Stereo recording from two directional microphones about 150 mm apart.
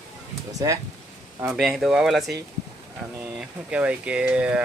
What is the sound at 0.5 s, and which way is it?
Speech, 20° right (ahead or behind).